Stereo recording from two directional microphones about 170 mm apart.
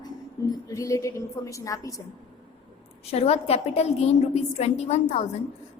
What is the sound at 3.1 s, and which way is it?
A woman's voice, 35° left (ahead or behind).